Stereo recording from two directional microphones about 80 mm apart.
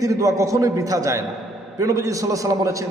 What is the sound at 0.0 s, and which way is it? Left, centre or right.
A man's voice, right.